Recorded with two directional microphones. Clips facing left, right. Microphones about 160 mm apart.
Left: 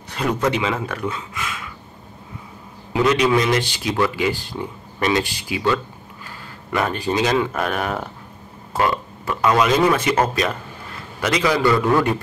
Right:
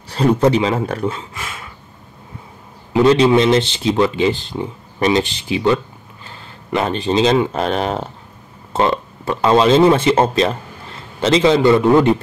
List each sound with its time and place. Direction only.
0.1 s speech: 30° right (ahead or behind)
2.9 s speech: 30° right (ahead or behind)